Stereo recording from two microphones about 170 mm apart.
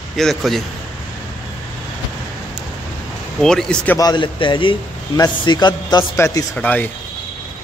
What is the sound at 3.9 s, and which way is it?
A man's voice, 25° left (ahead or behind).